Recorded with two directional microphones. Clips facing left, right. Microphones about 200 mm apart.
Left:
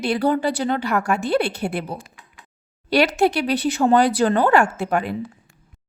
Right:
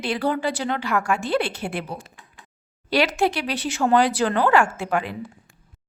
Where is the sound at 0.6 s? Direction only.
40° left (ahead or behind).